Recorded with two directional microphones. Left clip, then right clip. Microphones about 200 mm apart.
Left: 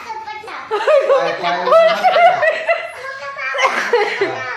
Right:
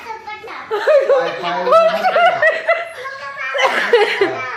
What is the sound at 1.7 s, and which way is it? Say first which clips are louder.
Snicker: left 1 dB; 5° left (ahead or behind).